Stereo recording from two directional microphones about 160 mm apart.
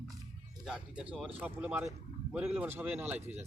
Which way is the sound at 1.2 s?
10° right (ahead or behind).